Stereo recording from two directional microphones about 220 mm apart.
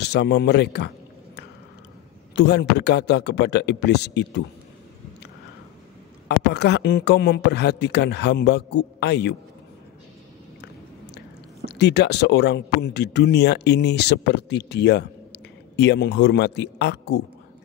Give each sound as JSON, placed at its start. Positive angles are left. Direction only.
{"t": 0.0, "sound": "a man's voice", "side_deg": 50}
{"t": 2.3, "sound": "a man's voice", "side_deg": 50}
{"t": 6.2, "sound": "a man's voice", "side_deg": 50}
{"t": 11.6, "sound": "a man's voice", "side_deg": 50}